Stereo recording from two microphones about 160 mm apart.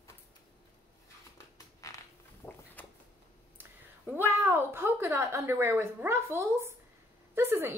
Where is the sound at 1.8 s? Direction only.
20° left (ahead or behind).